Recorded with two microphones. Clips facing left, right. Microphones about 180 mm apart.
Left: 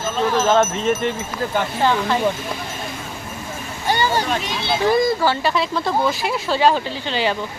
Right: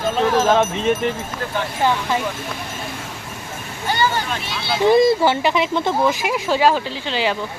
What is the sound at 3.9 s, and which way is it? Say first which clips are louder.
Speech: left 1 dB; 35° left (ahead or behind).